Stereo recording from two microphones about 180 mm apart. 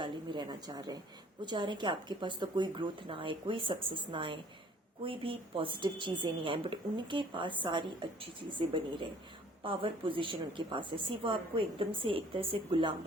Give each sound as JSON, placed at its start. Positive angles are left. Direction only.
{"t": 0.0, "sound": "a woman's voice", "side_deg": -25}